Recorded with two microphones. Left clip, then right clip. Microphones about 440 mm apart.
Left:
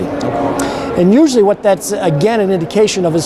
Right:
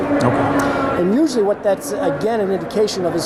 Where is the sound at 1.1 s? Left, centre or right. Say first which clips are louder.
Left 7 dB; left.